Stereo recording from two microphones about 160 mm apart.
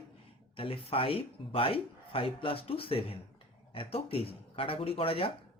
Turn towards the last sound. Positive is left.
turn(degrees=35)  # may be behind; listen again after turning